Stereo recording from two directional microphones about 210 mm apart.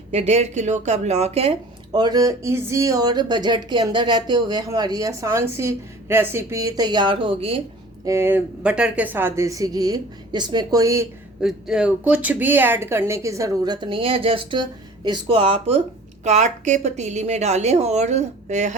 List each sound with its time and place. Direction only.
0.1 s speech: 30° right (ahead or behind)
8.0 s speech: 10° right (ahead or behind)
11.3 s a woman's voice: 5° right (ahead or behind); by 18.8 s 35° right (ahead or behind)